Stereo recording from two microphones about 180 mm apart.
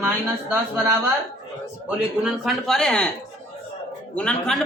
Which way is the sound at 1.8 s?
5° right (ahead or behind).